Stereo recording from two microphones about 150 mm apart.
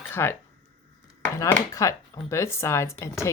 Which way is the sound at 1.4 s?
20° left (ahead or behind).